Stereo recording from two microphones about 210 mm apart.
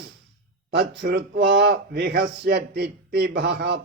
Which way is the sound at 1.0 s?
55° right (ahead or behind).